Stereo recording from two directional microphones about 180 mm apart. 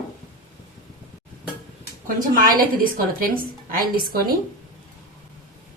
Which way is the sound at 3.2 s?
55° right (ahead or behind).